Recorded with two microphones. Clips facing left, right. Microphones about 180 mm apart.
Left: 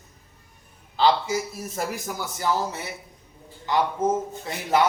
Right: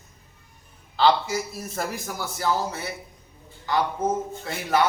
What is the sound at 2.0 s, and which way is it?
Speech, 20° left (ahead or behind).